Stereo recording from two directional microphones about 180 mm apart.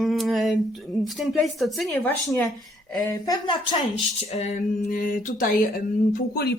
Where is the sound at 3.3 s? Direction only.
25° left (ahead or behind).